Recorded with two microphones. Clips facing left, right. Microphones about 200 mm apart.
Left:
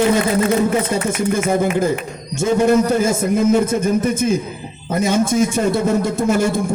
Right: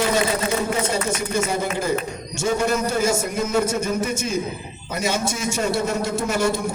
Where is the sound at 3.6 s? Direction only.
55° left (ahead or behind).